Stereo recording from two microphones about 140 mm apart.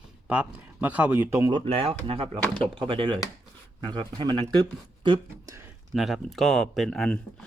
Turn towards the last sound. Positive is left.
turn(degrees=0)  # may be behind; listen again after turning